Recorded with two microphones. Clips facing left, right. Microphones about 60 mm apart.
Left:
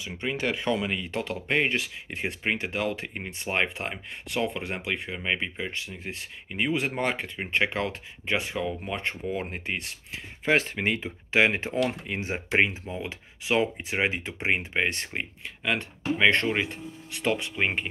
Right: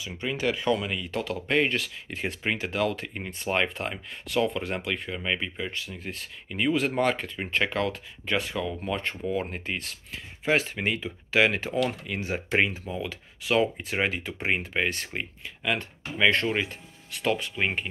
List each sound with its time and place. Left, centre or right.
0.0 s speech: left
6.0 s speech: centre
10.4 s speech: left